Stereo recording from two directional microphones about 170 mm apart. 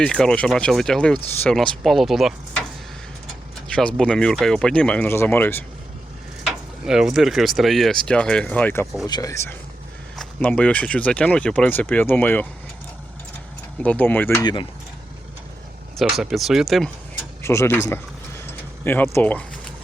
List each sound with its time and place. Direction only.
0.0 s speech: 5° left (ahead or behind)
3.7 s speech: 5° left (ahead or behind)
6.4 s speech: 5° right (ahead or behind)
9.0 s speech: 20° left (ahead or behind)
10.2 s speech: 5° left (ahead or behind)
13.8 s speech: 10° left (ahead or behind)
14.4 s speech: 30° left (ahead or behind)
16.0 s speech: centre (ahead or behind)
17.4 s speech: 15° left (ahead or behind)
18.9 s speech: 15° left (ahead or behind)